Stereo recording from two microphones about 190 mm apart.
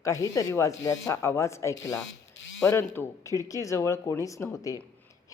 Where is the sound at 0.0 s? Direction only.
15° left (ahead or behind).